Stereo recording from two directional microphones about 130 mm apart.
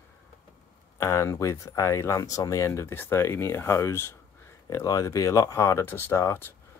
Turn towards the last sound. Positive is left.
turn(degrees=20)  # may be behind; listen again after turning